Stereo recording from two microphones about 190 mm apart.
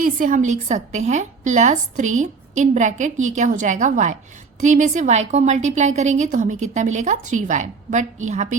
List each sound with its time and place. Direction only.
0.0 s a woman's voice: 45° right (ahead or behind)